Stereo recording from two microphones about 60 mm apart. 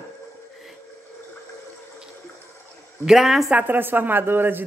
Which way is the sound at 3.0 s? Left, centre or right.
Centre.